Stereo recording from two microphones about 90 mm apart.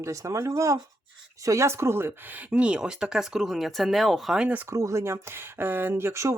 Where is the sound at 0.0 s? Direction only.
35° right (ahead or behind); by 4.4 s centre (ahead or behind).